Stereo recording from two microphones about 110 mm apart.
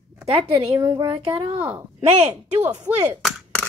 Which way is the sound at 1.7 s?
75° right (ahead or behind).